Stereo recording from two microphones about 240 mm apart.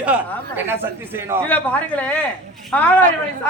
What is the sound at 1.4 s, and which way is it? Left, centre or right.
Speech, centre.